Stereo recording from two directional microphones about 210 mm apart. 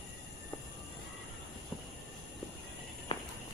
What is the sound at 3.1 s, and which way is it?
Walk, 25° left (ahead or behind).